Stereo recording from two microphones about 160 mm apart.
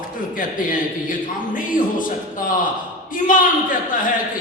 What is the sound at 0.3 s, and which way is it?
A man's voice, 60° left (ahead or behind).